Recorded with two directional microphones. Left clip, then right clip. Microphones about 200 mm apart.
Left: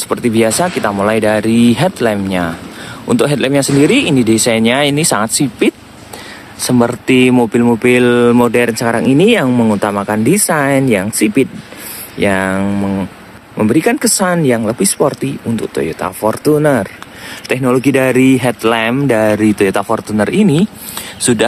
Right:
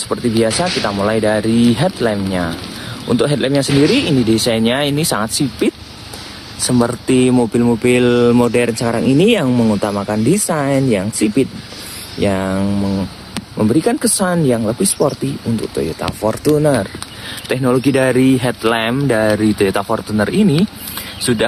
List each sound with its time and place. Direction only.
0.1 s speech: 25° left (ahead or behind)
16.6 s speech: 20° left (ahead or behind)